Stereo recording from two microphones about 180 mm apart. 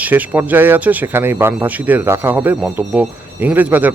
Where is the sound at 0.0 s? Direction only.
10° right (ahead or behind).